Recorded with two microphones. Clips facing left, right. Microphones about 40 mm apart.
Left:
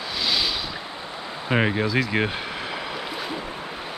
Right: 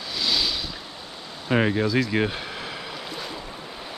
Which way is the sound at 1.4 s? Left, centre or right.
Centre.